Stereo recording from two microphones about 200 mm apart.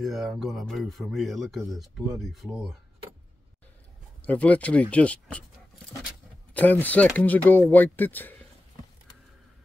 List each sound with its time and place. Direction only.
0.0 s speech: centre (ahead or behind)
4.2 s speech: 5° left (ahead or behind)
6.5 s speech: 10° left (ahead or behind)